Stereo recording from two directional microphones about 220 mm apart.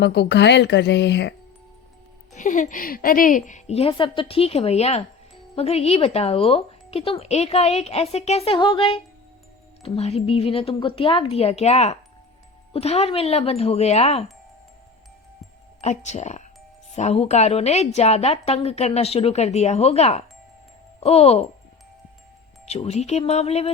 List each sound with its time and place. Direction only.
0.0 s a woman's voice: 50° left (ahead or behind)
2.3 s speech: 35° left (ahead or behind)
15.8 s speech: 30° left (ahead or behind)
22.6 s speech: 30° left (ahead or behind)